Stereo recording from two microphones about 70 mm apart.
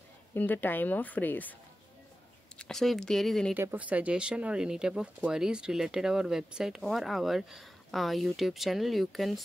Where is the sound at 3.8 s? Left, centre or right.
Centre.